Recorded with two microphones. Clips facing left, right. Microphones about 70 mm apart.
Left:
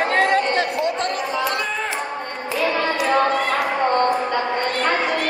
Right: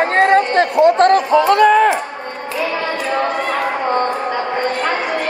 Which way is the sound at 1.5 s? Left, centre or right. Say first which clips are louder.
Right 14 dB; right.